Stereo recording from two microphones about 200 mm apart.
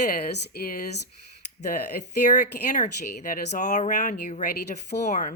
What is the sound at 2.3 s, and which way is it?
Speech, 40° left (ahead or behind).